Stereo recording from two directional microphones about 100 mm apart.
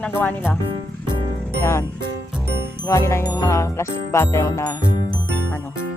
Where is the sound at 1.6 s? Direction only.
25° left (ahead or behind).